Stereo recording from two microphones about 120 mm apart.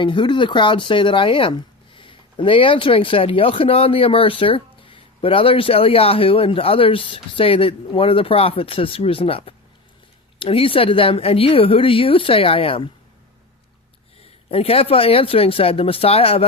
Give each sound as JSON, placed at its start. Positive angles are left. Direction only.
{"t": 0.0, "sound": "speech", "side_deg": 40}
{"t": 14.5, "sound": "speech", "side_deg": 55}